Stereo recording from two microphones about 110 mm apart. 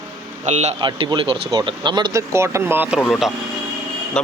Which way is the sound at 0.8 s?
50° right (ahead or behind).